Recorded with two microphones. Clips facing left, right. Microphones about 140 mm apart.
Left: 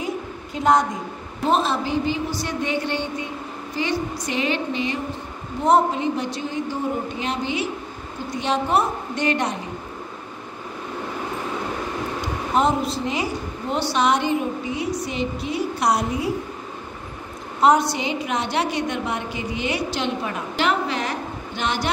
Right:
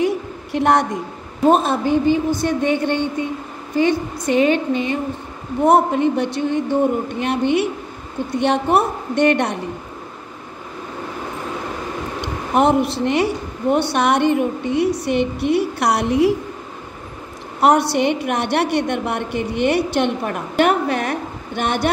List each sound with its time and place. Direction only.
0.0 s a sound: 70° right (ahead or behind)
1.4 s a woman's voice: 55° right (ahead or behind)
5.7 s a woman's voice: 60° right (ahead or behind)
12.2 s a woman's voice: 65° right (ahead or behind); by 16.3 s 80° right
17.6 s a woman's voice: 65° right (ahead or behind)